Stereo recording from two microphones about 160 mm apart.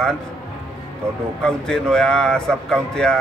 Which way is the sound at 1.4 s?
5° left (ahead or behind).